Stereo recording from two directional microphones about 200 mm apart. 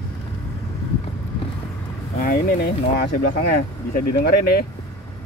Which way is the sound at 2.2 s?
50° left (ahead or behind).